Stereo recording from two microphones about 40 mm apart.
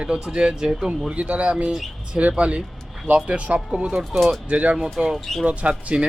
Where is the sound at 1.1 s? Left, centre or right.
Right.